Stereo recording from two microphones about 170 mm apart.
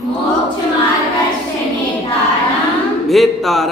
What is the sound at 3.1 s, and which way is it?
Speech, centre (ahead or behind).